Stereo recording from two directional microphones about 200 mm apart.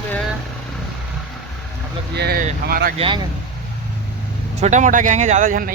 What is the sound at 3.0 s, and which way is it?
Speech, 25° right (ahead or behind).